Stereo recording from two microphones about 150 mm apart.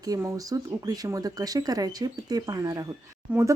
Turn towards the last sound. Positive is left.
turn(degrees=-10)  # may be behind; listen again after turning